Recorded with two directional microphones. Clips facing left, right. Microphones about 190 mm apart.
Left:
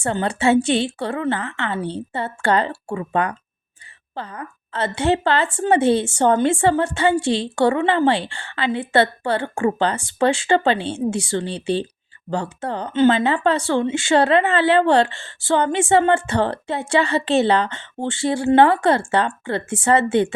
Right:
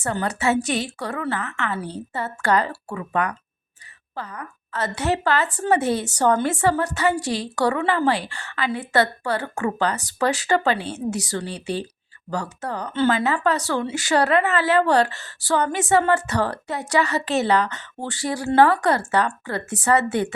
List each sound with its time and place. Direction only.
0.0 s speech: 25° left (ahead or behind)